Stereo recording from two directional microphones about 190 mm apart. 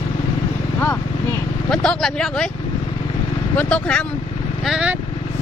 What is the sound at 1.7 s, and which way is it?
Speech, 5° left (ahead or behind).